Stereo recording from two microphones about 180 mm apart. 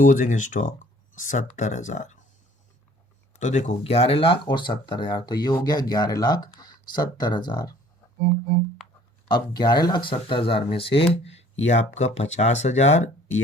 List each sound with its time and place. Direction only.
0.0 s speech: 45° left (ahead or behind)
3.3 s speech: 40° left (ahead or behind); by 7.8 s 25° left (ahead or behind)
9.3 s speech: 25° left (ahead or behind); by 13.4 s 40° left (ahead or behind)